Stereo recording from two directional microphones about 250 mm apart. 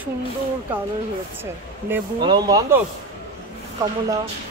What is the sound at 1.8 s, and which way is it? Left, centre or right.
Speech, centre.